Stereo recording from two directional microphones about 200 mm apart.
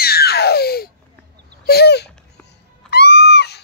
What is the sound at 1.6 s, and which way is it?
Speech, 50° left (ahead or behind).